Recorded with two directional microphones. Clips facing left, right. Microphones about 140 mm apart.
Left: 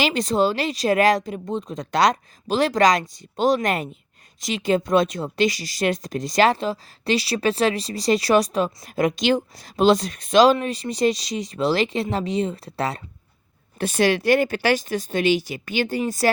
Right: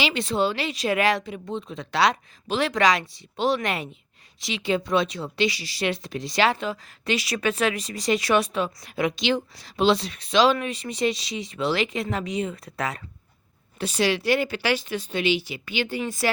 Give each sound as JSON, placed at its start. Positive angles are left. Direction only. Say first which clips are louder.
{"t": 0.0, "sound": "speech", "louder": "left 4 dB", "side_deg": 40}
{"t": 13.7, "sound": "speech", "louder": "left 4 dB", "side_deg": 50}